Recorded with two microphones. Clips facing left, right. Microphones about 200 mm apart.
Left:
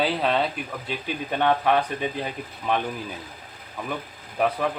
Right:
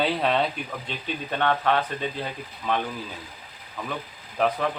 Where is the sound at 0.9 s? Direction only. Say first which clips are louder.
Left 3 dB; 15° left (ahead or behind).